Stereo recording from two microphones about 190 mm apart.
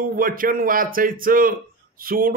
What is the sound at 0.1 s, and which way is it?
A man's voice, 50° right (ahead or behind).